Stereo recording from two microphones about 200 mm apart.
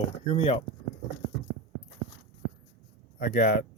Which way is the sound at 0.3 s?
30° left (ahead or behind).